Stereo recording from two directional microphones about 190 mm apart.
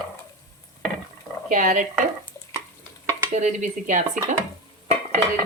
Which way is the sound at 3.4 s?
40° right (ahead or behind).